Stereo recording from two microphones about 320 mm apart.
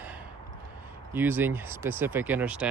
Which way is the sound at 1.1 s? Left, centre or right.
Centre.